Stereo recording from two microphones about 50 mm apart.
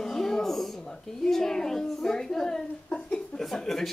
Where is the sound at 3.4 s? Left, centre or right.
Centre.